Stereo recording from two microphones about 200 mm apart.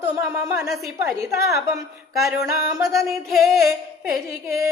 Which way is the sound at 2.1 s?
Centre (ahead or behind).